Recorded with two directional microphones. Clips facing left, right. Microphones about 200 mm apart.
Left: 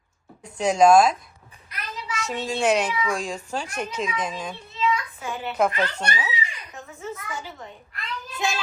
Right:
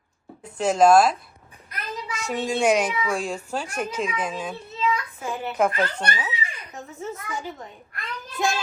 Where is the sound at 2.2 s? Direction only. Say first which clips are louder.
Right 2 dB; 10° right (ahead or behind).